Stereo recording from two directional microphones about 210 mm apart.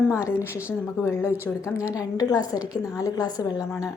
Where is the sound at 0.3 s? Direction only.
15° left (ahead or behind).